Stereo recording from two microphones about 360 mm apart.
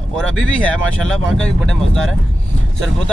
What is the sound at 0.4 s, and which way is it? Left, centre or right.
Speech, centre.